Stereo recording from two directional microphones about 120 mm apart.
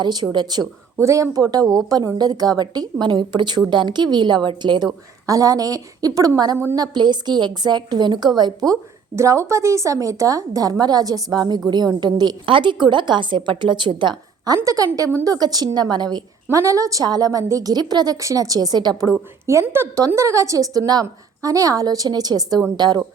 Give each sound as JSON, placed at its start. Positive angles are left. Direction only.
{"t": 0.0, "sound": "a woman's voice", "side_deg": -35}
{"t": 5.2, "sound": "a woman's voice", "side_deg": -30}
{"t": 19.5, "sound": "a woman's voice", "side_deg": -20}